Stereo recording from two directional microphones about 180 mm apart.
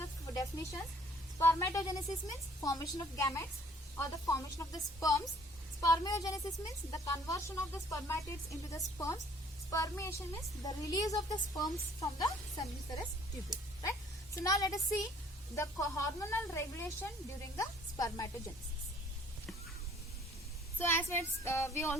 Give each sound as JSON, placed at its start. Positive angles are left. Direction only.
{"t": 0.3, "sound": "a woman's voice", "side_deg": 20}
{"t": 14.3, "sound": "a woman's voice", "side_deg": 20}
{"t": 20.7, "sound": "speech", "side_deg": 15}